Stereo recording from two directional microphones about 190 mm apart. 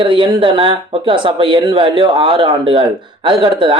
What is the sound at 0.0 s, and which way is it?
Speech, 25° right (ahead or behind).